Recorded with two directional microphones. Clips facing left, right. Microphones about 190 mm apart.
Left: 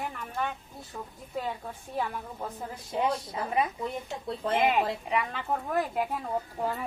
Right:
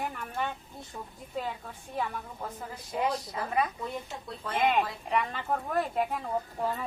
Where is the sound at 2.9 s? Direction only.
25° left (ahead or behind).